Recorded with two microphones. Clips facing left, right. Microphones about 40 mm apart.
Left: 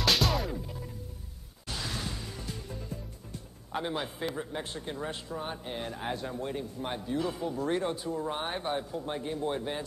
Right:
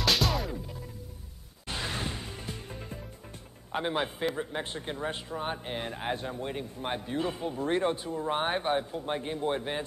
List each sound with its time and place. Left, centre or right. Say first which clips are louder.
0.0 s music: even; centre
1.7 s music: right 2 dB; right
3.7 s speech: right 3 dB; right